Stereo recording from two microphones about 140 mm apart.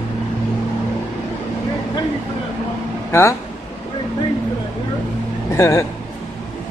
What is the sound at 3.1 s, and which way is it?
Speech, 20° left (ahead or behind).